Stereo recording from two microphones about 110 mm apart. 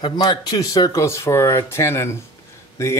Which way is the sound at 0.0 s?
40° left (ahead or behind).